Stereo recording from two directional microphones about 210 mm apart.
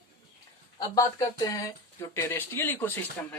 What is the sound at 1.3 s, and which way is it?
Speech, 15° left (ahead or behind).